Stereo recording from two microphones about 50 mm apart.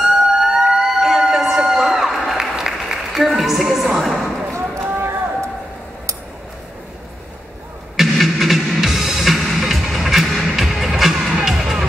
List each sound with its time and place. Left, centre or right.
0.0 s emergency vehicle: centre
2.9 s applause: centre
3.3 s speech: centre
5.0 s a sound: right
7.9 s music: centre